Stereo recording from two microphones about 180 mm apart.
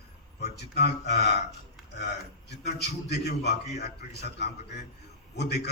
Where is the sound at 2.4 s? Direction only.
65° left (ahead or behind).